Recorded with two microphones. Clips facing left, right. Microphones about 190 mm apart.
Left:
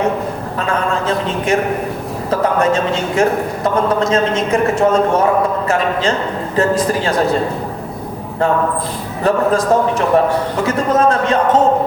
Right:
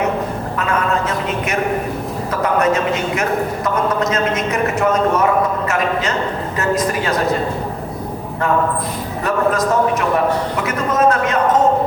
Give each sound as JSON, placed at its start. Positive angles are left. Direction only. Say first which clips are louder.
{"t": 0.7, "sound": "a man's voice", "louder": "left 2 dB", "side_deg": 30}
{"t": 9.2, "sound": "a man's voice", "louder": "left 3 dB", "side_deg": 30}